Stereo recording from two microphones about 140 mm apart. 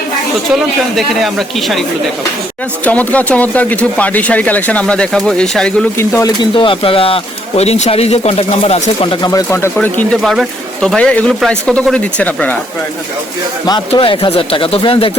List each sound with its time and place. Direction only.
0.9 s speech: centre (ahead or behind)
2.8 s speech: 10° left (ahead or behind)
6.0 s speech: 20° left (ahead or behind)
6.4 s speech: 35° left (ahead or behind)
9.2 s speech: 20° left (ahead or behind)
9.7 s speech: 10° left (ahead or behind)
13.7 s speech: 35° left (ahead or behind)